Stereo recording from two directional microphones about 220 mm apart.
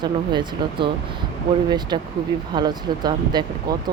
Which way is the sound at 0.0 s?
20° right (ahead or behind).